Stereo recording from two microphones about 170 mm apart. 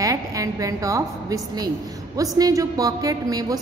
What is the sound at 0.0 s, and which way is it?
A woman's voice, 20° right (ahead or behind).